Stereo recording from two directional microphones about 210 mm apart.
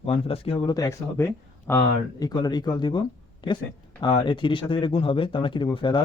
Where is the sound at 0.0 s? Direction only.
25° left (ahead or behind).